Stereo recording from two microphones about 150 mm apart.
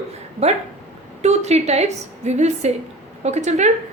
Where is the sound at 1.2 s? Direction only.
45° right (ahead or behind).